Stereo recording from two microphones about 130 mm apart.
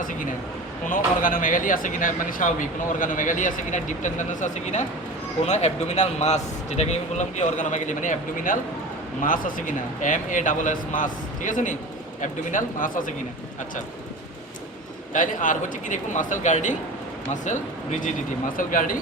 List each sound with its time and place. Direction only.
0.0 s a sound: 90° left
0.9 s a man's voice: 90° left
9.2 s speech: 90° left
15.1 s speech: 90° left; by 17.6 s 75° left (ahead or behind)
18.5 s speech: 90° left